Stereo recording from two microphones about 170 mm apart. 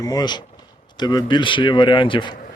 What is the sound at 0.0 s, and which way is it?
A man's voice, 25° left (ahead or behind).